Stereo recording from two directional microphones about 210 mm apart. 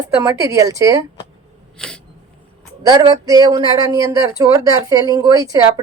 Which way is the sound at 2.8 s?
20° right (ahead or behind).